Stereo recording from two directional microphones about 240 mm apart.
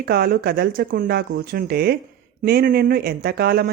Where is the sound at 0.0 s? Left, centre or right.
Right.